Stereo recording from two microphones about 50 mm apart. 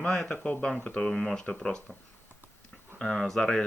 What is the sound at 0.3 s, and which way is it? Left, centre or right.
Speech, centre.